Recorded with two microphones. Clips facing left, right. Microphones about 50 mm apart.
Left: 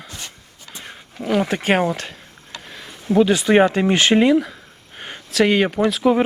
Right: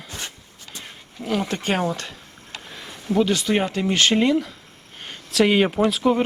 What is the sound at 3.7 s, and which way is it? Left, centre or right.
Speech, left.